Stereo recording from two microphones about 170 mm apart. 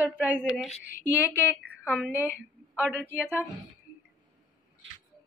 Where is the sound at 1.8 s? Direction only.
5° right (ahead or behind).